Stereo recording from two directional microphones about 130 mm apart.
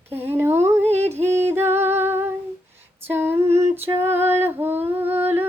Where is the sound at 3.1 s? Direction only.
15° right (ahead or behind).